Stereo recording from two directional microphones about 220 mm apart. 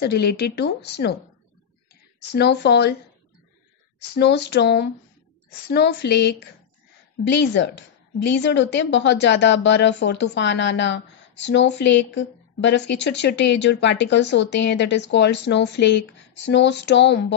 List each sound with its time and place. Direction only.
0.0 s a woman's voice: 45° left (ahead or behind)
2.3 s a woman's voice: 50° left (ahead or behind)
4.1 s a woman's voice: 50° left (ahead or behind)